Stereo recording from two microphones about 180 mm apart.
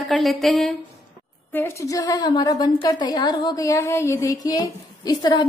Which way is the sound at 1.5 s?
15° left (ahead or behind).